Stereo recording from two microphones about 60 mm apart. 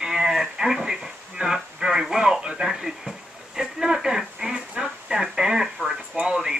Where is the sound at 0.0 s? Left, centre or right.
Centre.